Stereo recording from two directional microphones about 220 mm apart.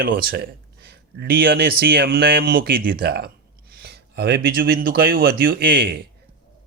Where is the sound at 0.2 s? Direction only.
45° right (ahead or behind).